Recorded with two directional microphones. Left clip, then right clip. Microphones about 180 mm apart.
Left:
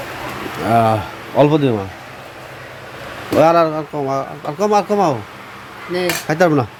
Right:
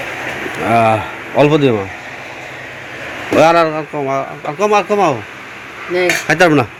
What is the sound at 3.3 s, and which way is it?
Speech, 15° left (ahead or behind).